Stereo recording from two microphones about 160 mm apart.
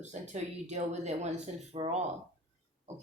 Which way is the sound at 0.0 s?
45° right (ahead or behind).